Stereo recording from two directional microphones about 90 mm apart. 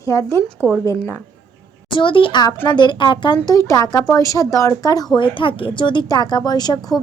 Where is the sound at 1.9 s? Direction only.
65° left (ahead or behind); by 4.9 s 35° left (ahead or behind).